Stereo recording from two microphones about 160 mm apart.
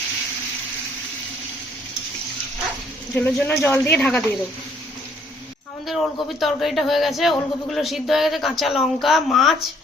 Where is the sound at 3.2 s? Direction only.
10° left (ahead or behind).